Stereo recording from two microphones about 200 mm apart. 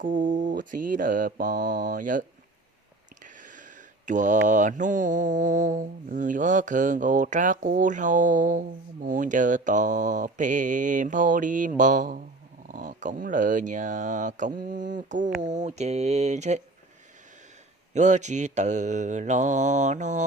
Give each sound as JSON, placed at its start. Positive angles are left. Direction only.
{"t": 0.0, "sound": "speech", "side_deg": -40}
{"t": 3.2, "sound": "speech", "side_deg": -40}
{"t": 17.9, "sound": "speech", "side_deg": -35}